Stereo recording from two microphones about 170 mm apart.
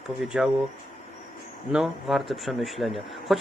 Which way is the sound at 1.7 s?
Centre (ahead or behind).